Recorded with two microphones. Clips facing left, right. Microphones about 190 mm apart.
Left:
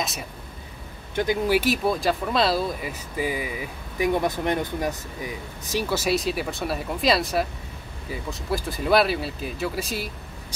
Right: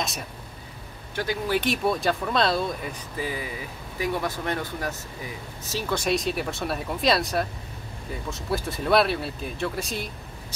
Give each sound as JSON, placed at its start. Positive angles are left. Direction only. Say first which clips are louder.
{"t": 1.1, "sound": "speech", "louder": "left 4 dB", "side_deg": 20}
{"t": 1.6, "sound": "speech", "louder": "left 1 dB", "side_deg": 0}
{"t": 5.9, "sound": "speech", "louder": "right 1 dB", "side_deg": 0}